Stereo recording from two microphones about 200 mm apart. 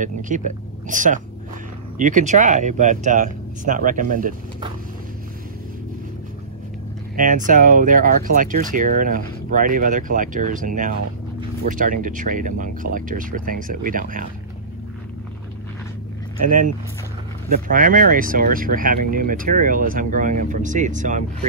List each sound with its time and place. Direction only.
0.0 s speech: 40° right (ahead or behind)
7.2 s speech: 40° right (ahead or behind)
16.4 s speech: 40° right (ahead or behind)